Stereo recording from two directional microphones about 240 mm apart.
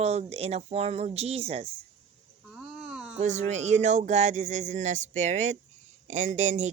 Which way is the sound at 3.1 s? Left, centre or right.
Right.